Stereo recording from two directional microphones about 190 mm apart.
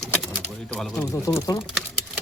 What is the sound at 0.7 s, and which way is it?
Speech, 5° left (ahead or behind).